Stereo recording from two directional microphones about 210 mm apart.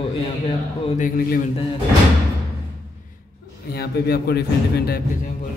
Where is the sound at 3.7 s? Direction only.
50° left (ahead or behind).